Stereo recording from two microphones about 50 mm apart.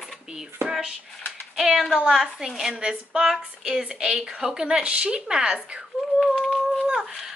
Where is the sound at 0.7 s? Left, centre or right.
Centre.